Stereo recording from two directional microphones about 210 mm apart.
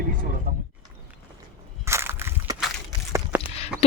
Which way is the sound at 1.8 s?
10° right (ahead or behind).